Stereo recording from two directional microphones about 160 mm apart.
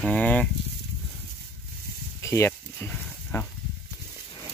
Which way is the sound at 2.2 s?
15° left (ahead or behind).